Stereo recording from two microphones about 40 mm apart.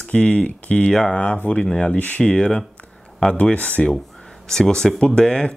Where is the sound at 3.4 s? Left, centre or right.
Left.